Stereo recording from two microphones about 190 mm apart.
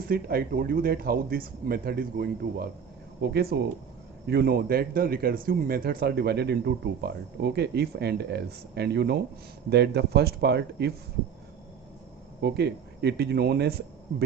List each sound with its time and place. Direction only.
0.1 s speech: 55° right (ahead or behind)
12.4 s speech: 60° right (ahead or behind)